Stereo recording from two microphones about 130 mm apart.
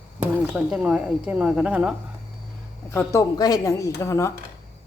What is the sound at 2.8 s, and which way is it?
A woman's voice, 20° left (ahead or behind).